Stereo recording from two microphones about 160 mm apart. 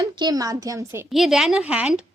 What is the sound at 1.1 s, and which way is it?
Speech, centre (ahead or behind).